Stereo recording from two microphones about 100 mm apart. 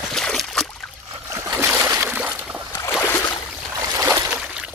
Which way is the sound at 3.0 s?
20° left (ahead or behind).